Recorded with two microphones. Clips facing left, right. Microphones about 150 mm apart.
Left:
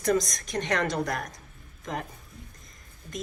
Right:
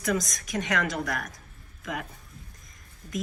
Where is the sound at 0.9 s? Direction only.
45° left (ahead or behind).